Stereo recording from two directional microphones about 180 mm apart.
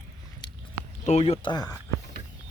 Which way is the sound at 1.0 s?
35° left (ahead or behind).